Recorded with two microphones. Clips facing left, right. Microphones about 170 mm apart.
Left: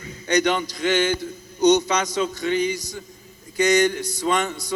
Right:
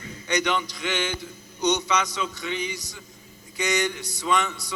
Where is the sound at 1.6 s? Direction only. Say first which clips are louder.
Left 6 dB; 45° left (ahead or behind).